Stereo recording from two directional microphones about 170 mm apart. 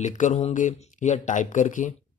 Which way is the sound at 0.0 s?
45° left (ahead or behind).